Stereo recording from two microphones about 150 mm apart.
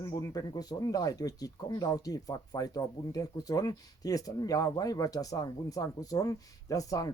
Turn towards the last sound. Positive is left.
turn(degrees=25)  # may be behind; listen again after turning